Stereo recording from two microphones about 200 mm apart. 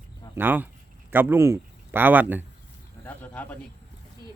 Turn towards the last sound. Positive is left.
turn(degrees=10)  # may be behind; listen again after turning